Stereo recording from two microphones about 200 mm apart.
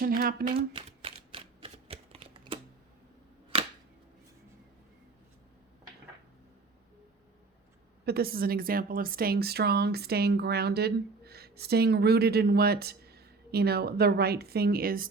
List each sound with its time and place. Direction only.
0.2 s a woman's voice: 50° right (ahead or behind)
0.4 s typewriter: 25° right (ahead or behind)
8.0 s a woman's voice: 50° right (ahead or behind)